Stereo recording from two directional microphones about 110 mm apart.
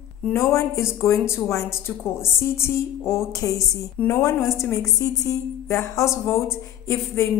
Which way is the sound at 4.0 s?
15° left (ahead or behind).